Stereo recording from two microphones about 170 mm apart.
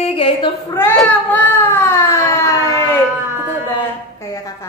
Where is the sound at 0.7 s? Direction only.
15° left (ahead or behind).